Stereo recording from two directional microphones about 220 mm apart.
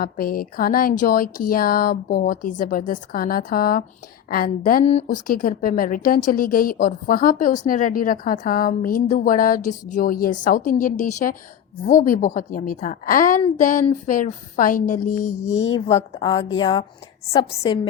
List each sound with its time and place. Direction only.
0.0 s a woman's voice: 40° left (ahead or behind)
15.5 s a woman's voice: 25° left (ahead or behind)